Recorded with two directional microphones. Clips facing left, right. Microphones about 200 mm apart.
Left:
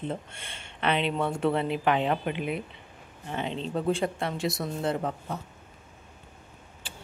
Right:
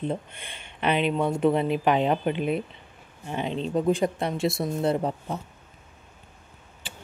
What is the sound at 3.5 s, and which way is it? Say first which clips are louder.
Speech: right 5 dB; 15° right (ahead or behind).